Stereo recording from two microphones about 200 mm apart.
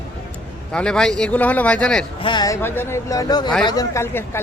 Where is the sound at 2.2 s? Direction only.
20° left (ahead or behind).